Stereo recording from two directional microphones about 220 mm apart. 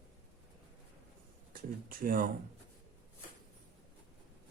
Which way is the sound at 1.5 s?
40° right (ahead or behind).